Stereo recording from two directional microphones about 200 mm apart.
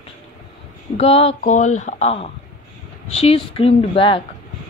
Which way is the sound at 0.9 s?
30° left (ahead or behind).